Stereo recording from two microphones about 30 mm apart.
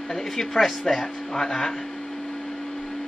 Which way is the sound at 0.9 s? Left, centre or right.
Centre.